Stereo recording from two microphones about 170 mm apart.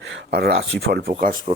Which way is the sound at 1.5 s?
35° right (ahead or behind).